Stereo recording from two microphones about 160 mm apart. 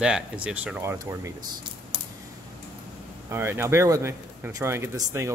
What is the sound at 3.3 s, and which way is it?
Speech, 15° right (ahead or behind).